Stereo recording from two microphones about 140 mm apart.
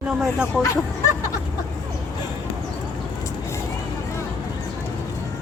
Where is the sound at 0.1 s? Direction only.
5° right (ahead or behind).